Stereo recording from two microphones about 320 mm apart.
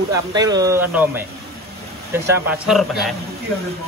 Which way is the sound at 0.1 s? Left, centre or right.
Centre.